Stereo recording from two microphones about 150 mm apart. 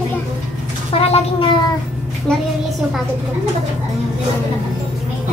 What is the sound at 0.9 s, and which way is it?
Speech, 40° left (ahead or behind).